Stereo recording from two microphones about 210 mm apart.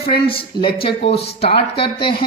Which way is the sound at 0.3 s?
25° left (ahead or behind).